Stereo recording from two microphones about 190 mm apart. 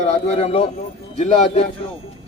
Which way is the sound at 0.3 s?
35° left (ahead or behind).